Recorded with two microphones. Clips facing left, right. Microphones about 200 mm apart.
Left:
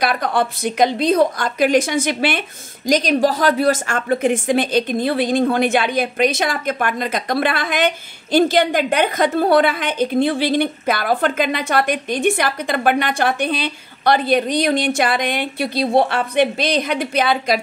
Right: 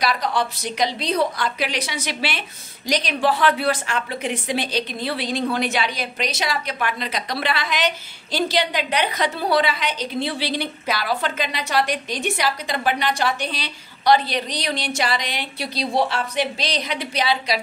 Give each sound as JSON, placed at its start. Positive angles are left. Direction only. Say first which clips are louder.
{"t": 0.0, "sound": "a woman's voice", "louder": "left 4 dB", "side_deg": 55}